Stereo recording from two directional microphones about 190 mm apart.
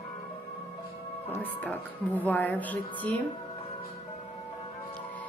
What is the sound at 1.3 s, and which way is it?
Music, 10° left (ahead or behind).